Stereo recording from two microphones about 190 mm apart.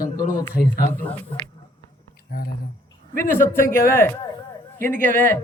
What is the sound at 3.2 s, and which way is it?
A man's voice, 15° left (ahead or behind).